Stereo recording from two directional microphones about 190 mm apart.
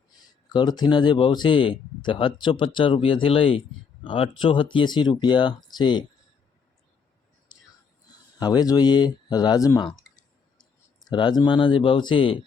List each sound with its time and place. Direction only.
0.4 s speech: 25° left (ahead or behind)
8.4 s speech: 20° left (ahead or behind)
11.1 s speech: 20° left (ahead or behind)